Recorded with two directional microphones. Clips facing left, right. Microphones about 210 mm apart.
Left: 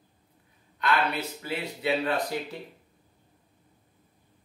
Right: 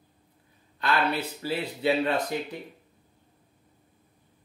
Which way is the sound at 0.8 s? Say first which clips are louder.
Right 1 dB; 30° right (ahead or behind).